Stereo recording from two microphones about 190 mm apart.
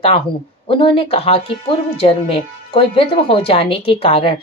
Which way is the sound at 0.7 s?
30° left (ahead or behind).